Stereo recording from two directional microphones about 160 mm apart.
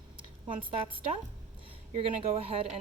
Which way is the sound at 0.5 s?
35° right (ahead or behind).